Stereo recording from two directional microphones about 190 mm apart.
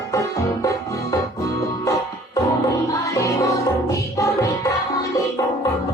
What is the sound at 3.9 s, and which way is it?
Music, 15° left (ahead or behind).